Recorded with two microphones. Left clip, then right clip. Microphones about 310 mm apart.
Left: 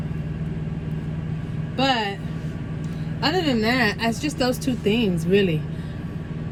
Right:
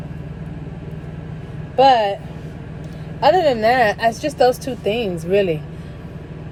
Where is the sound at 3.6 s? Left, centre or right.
Centre.